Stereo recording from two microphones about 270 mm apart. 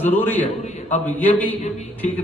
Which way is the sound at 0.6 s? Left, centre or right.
Left.